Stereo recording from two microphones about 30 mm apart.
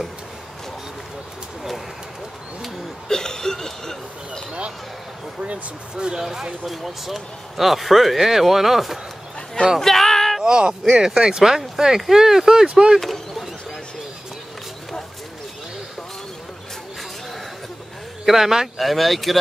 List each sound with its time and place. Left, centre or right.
3.1 s a sound: centre
5.9 s speech: right
6.6 s speech: centre
9.8 s a sound: centre
10.4 s speech: right
12.6 s speech: right
13.0 s vehicle: centre
18.2 s speech: centre
18.8 s speech: centre